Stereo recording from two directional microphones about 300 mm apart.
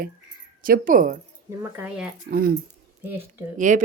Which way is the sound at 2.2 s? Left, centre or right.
Right.